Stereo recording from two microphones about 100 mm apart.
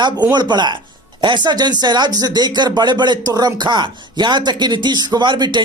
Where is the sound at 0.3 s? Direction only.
50° right (ahead or behind).